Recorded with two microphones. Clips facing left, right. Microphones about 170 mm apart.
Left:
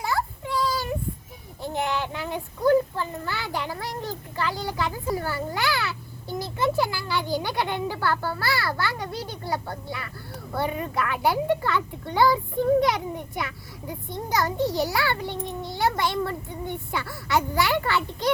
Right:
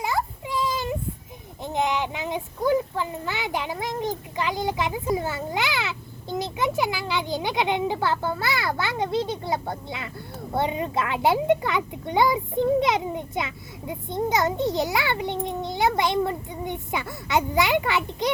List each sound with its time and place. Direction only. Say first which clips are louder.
0.0 s child singing: right 1 dB; 20° right (ahead or behind)
1.6 s a child's voice: right 2 dB; 20° right (ahead or behind)